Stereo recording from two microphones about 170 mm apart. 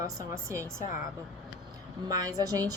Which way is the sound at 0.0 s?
15° right (ahead or behind).